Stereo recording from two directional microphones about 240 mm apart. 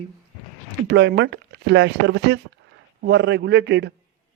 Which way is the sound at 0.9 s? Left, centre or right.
Right.